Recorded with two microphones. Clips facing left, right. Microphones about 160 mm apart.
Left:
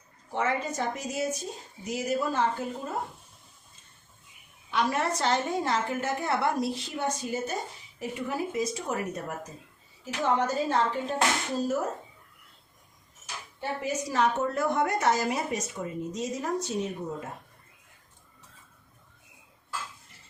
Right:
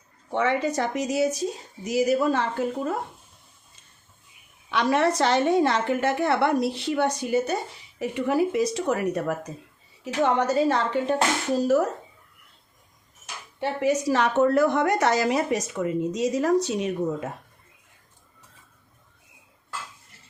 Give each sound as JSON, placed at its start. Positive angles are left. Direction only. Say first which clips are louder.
{"t": 0.3, "sound": "a woman's voice", "louder": "right 5 dB", "side_deg": -75}
{"t": 4.7, "sound": "a woman's voice", "louder": "right 6 dB", "side_deg": -80}
{"t": 13.6, "sound": "a woman's voice", "louder": "right 8 dB", "side_deg": -80}